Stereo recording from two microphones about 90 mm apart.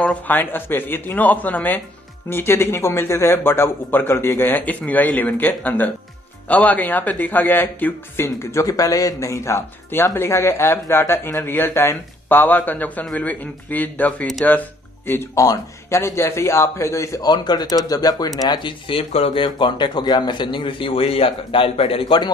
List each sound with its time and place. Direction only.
0.3 s a man's voice: 20° left (ahead or behind)
15.3 s a man's voice: 40° left (ahead or behind)
16.0 s a man's voice: 30° left (ahead or behind)
17.3 s speech: 50° left (ahead or behind)
18.6 s speech: 70° left (ahead or behind); by 22.2 s 90° left